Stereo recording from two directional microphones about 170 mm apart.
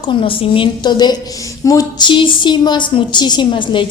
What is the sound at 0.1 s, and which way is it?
A woman's voice, 30° left (ahead or behind).